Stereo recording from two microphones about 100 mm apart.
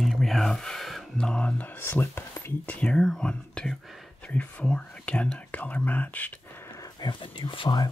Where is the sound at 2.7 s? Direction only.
10° left (ahead or behind).